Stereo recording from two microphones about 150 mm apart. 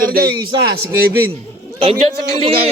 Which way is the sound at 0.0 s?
80° right.